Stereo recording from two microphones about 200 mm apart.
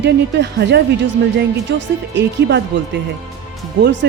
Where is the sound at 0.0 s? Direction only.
60° right (ahead or behind).